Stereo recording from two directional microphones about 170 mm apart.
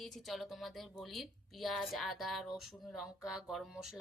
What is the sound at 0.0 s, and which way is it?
Speech, centre (ahead or behind).